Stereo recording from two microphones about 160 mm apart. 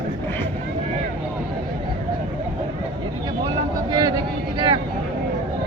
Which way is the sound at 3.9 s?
25° right (ahead or behind).